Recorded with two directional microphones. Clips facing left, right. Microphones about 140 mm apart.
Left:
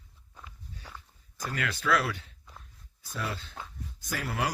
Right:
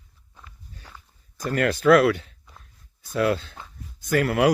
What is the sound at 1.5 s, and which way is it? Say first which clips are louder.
Speech: right 12 dB; 55° right (ahead or behind).